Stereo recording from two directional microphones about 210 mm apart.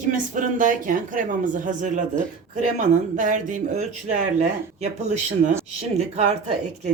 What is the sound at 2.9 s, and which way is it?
Speech, 35° right (ahead or behind).